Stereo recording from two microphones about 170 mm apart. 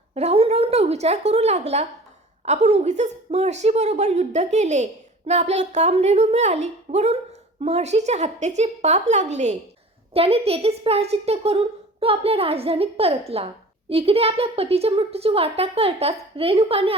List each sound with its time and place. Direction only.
0.1 s a woman's voice: 35° right (ahead or behind)